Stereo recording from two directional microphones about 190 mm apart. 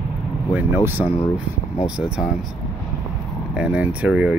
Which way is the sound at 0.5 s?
10° right (ahead or behind).